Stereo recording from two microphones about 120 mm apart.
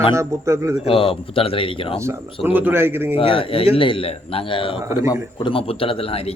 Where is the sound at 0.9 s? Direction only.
50° left (ahead or behind).